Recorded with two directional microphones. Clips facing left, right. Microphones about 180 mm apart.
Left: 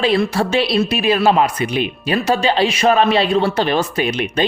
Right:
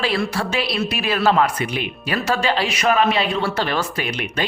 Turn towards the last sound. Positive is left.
turn(degrees=20)  # may be behind; listen again after turning